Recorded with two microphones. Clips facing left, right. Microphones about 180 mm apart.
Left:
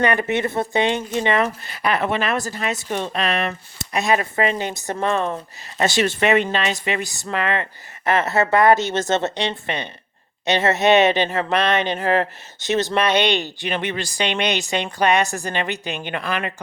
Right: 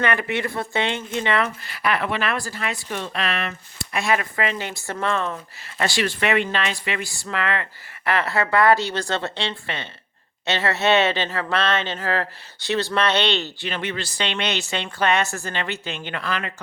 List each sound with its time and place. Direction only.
0.0 s speech: 20° left (ahead or behind)